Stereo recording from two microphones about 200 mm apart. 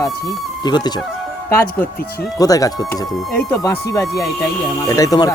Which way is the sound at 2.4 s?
20° left (ahead or behind).